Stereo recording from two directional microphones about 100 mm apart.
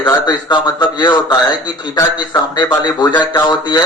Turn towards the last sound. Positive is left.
turn(degrees=45)  # may be behind; listen again after turning